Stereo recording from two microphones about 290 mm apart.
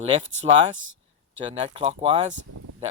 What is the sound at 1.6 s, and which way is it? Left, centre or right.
Speech, centre.